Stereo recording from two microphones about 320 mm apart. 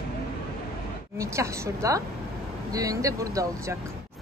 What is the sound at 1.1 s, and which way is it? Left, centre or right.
Speech, centre.